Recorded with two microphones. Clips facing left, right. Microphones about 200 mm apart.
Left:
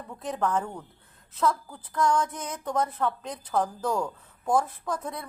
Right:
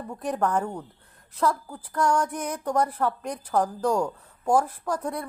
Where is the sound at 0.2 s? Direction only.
10° right (ahead or behind).